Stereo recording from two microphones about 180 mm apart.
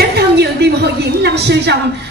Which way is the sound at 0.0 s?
65° right (ahead or behind).